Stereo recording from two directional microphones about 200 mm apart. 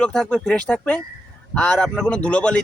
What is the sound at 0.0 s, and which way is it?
Speech, 5° left (ahead or behind).